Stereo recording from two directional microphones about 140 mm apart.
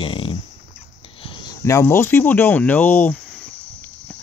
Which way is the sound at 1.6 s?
20° left (ahead or behind).